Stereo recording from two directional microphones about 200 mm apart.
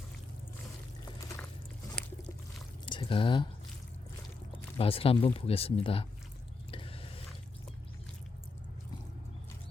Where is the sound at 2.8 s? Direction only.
25° left (ahead or behind).